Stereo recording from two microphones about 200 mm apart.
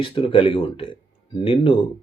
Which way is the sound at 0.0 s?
25° left (ahead or behind).